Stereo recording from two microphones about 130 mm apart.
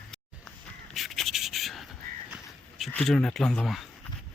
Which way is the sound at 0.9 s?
Centre (ahead or behind).